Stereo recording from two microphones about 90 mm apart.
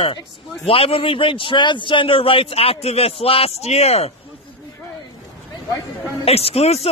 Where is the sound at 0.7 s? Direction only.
90° left.